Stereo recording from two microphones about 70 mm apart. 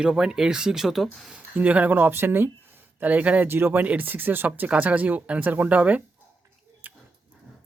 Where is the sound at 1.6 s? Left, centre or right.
Right.